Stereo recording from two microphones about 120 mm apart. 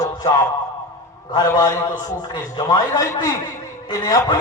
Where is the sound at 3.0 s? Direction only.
25° left (ahead or behind).